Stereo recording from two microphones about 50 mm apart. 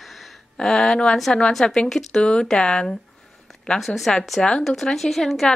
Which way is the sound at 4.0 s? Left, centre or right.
Centre.